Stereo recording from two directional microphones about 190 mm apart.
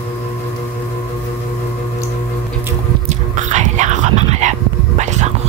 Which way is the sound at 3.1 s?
40° right (ahead or behind).